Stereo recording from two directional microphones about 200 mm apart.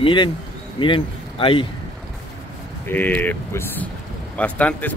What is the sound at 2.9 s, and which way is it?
Speech, 10° left (ahead or behind).